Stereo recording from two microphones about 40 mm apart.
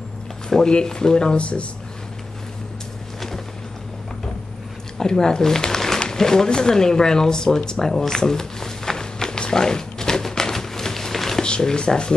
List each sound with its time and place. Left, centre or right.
0.5 s speech: centre
4.9 s speech: centre
8.2 s a sound: centre
11.4 s speech: left